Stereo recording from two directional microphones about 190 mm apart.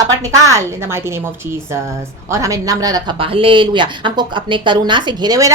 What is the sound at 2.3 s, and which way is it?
Speech, 15° right (ahead or behind).